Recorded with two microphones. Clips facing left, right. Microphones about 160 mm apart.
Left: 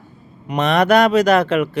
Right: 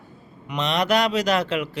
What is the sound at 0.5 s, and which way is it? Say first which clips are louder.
Speech: left 7 dB; 55° left (ahead or behind).